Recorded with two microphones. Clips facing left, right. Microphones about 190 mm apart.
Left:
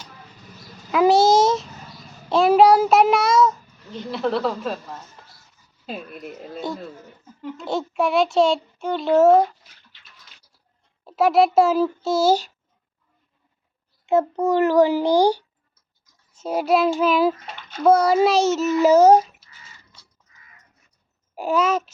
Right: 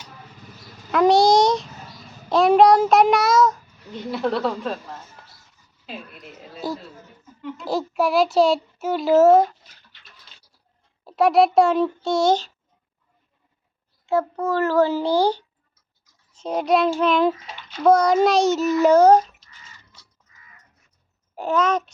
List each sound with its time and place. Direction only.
0.9 s child singing: 5° left (ahead or behind)
4.1 s a child's voice: centre (ahead or behind)
6.6 s a child's voice: 5° right (ahead or behind)
11.0 s a child's voice: centre (ahead or behind)
14.1 s a child's voice: 20° left (ahead or behind)
17.4 s a sound: 55° left (ahead or behind)
17.8 s a child's voice: 5° left (ahead or behind)
21.3 s a child's voice: 10° left (ahead or behind)